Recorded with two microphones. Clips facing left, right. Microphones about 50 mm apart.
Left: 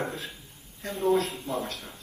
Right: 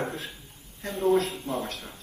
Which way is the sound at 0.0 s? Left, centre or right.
Right.